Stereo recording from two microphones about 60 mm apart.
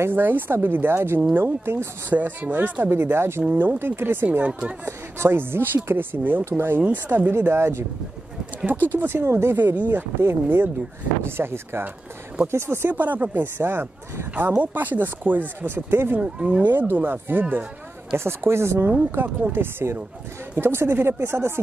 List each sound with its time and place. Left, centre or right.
0.1 s speech: right
2.0 s speech: right
3.4 s speech: right
4.8 s speech: right
6.4 s speech: right
6.8 s speech: right
8.8 s speech: right
12.9 s speech: right
16.2 s speech: centre
16.6 s speech: right
18.1 s speech: right